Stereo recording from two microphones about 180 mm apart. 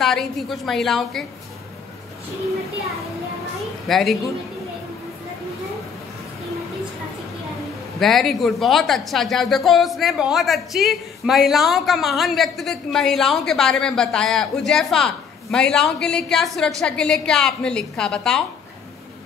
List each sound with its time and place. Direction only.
0.0 s a woman's voice: centre (ahead or behind)
3.5 s a sound: centre (ahead or behind)
8.0 s a woman's voice: centre (ahead or behind)